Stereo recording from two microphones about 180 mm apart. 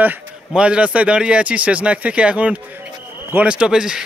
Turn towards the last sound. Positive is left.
turn(degrees=-5)  # may be behind; listen again after turning